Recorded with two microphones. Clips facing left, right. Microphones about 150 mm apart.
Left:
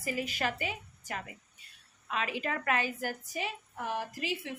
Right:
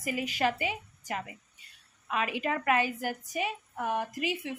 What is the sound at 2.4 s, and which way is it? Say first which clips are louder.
A woman's voice: right 5 dB; 20° right (ahead or behind).